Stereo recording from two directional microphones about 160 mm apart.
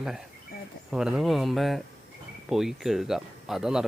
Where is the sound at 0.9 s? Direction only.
5° right (ahead or behind).